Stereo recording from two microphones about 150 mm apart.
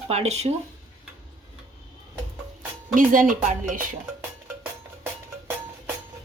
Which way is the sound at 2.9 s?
65° right (ahead or behind).